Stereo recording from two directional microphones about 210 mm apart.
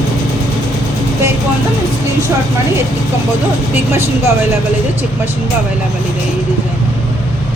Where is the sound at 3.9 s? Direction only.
10° right (ahead or behind).